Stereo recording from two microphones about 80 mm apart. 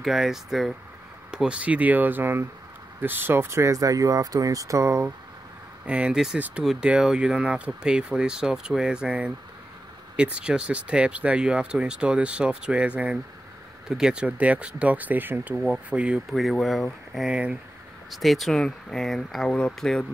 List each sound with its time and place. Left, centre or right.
0.0 s speech: centre; by 5.0 s right
5.9 s speech: centre
15.6 s speech: centre
16.3 s speech: centre
17.3 s speech: centre
18.1 s speech: centre